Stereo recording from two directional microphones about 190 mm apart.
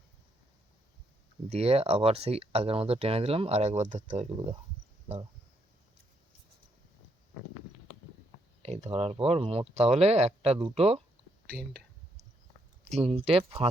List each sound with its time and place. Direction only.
1.5 s speech: 30° right (ahead or behind)
8.6 s speech: 35° right (ahead or behind)
12.9 s speech: 30° right (ahead or behind)